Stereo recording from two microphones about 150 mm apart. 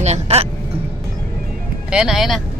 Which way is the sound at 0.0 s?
45° right (ahead or behind).